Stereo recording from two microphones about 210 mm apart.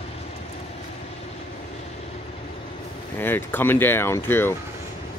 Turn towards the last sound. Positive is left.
turn(degrees=10)  # may be behind; listen again after turning